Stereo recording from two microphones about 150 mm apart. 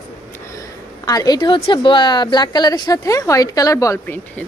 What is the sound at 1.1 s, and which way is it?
A woman's voice, 25° left (ahead or behind).